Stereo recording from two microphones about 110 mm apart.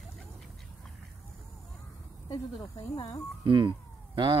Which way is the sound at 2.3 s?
30° left (ahead or behind).